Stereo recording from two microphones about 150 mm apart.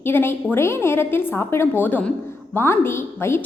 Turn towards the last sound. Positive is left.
turn(degrees=15)  # may be behind; listen again after turning